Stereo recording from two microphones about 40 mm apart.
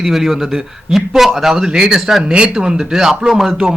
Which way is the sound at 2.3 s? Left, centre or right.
Right.